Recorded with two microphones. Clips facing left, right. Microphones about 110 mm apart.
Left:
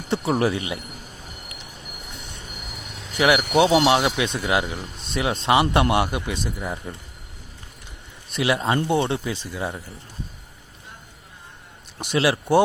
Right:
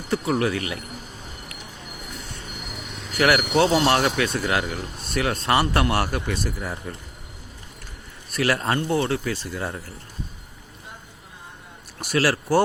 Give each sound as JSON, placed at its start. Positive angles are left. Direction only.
{"t": 0.1, "sound": "speech", "side_deg": 30}
{"t": 3.2, "sound": "speech", "side_deg": 15}
{"t": 8.4, "sound": "speech", "side_deg": 15}
{"t": 11.9, "sound": "speech", "side_deg": 20}